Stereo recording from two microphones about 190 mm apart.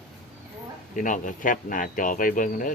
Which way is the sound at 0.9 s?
45° left (ahead or behind).